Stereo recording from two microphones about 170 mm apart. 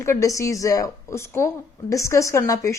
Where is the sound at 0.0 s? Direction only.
15° left (ahead or behind).